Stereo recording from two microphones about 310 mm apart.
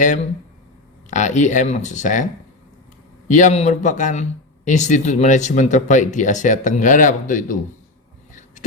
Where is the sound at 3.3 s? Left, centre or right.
Left.